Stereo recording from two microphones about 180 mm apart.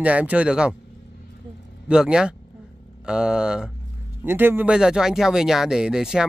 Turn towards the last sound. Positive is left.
turn(degrees=-5)  # may be behind; listen again after turning